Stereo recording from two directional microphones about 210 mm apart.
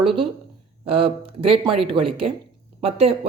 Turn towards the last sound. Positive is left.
turn(degrees=-30)  # may be behind; listen again after turning